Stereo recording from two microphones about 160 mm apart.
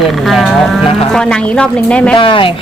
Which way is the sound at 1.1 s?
5° left (ahead or behind).